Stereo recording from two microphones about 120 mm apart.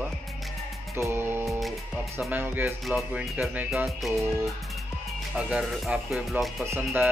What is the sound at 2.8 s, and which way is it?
Speech, 5° right (ahead or behind).